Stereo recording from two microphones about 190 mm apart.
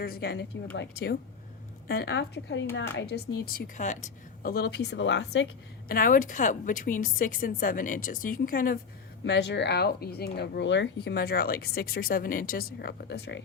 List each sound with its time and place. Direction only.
0.0 s speech: 55° left (ahead or behind)
5.9 s speech: 45° left (ahead or behind)
9.2 s speech: 65° left (ahead or behind)